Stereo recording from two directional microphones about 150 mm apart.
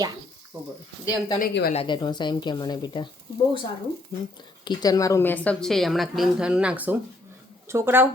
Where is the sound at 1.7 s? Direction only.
35° left (ahead or behind).